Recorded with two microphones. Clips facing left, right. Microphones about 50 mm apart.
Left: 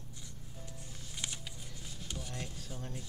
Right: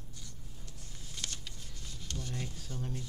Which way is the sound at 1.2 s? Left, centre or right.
Centre.